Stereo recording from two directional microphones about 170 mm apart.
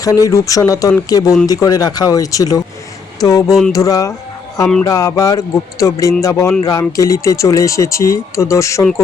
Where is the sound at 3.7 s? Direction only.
20° left (ahead or behind).